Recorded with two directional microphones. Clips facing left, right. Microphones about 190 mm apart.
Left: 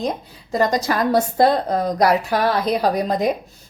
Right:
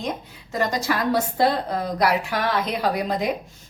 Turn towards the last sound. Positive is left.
turn(degrees=40)  # may be behind; listen again after turning